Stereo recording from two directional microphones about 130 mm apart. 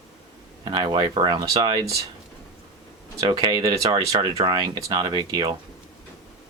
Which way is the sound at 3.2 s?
35° right (ahead or behind).